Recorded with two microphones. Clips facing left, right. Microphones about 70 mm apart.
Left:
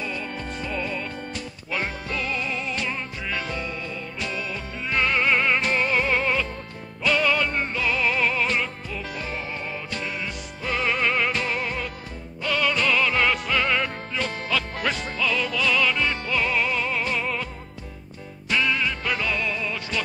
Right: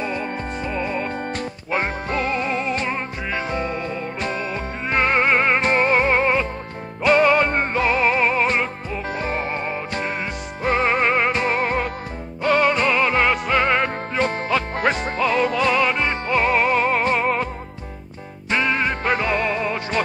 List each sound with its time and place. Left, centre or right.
0.0 s music: right
18.5 s music: right